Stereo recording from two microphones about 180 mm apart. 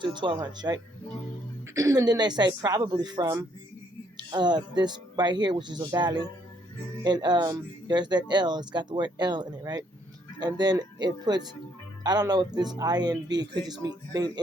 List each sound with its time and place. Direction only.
0.0 s speech: 25° right (ahead or behind)